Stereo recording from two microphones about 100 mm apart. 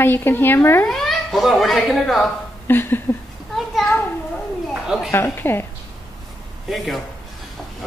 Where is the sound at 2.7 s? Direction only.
20° left (ahead or behind).